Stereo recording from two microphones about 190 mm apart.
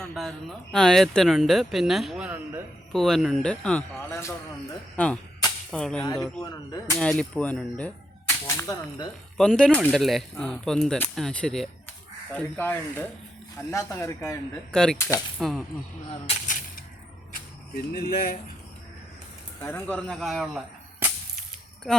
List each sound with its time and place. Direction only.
0.1 s a man's voice: centre (ahead or behind)
6.4 s speech: 20° left (ahead or behind)
7.0 s speech: 5° left (ahead or behind)
14.7 s speech: 5° left (ahead or behind)
16.3 s a sound: 45° left (ahead or behind)
17.3 s speech: 55° left (ahead or behind)
19.6 s speech: 5° left (ahead or behind)
21.9 s speech: centre (ahead or behind)